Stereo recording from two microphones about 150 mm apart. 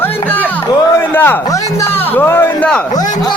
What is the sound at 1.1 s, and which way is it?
Speech, 15° left (ahead or behind).